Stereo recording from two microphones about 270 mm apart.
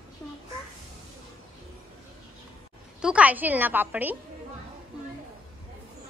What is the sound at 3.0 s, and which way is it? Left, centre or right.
A woman's voice, centre.